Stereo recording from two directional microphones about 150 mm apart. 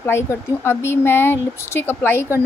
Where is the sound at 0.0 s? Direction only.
15° left (ahead or behind).